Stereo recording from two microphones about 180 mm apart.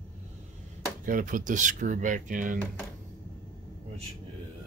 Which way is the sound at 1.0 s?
50° right (ahead or behind).